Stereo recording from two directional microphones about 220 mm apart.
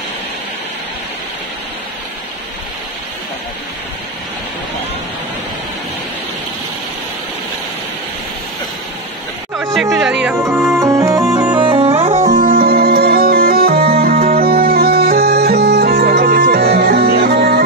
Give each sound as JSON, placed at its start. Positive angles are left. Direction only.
{"t": 9.8, "sound": "music", "side_deg": 0}
{"t": 11.5, "sound": "music", "side_deg": -25}
{"t": 14.3, "sound": "bagpipes", "side_deg": -45}